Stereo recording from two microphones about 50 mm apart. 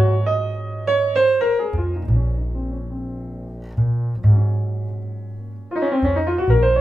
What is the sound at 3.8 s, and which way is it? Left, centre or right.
Double bass, centre.